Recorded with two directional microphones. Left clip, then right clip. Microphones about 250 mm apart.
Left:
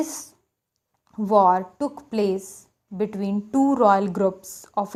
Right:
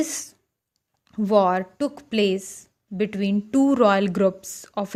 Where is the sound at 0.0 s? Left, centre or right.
Right.